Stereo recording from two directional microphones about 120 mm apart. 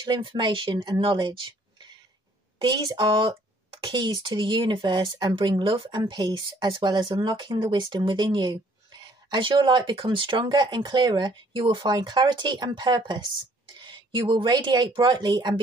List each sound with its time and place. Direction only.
0.0 s speech: 40° right (ahead or behind)